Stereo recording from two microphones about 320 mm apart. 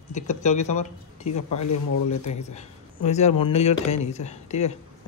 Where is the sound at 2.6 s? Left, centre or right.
Left.